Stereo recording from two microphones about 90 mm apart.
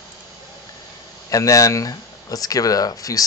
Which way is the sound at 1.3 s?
40° left (ahead or behind).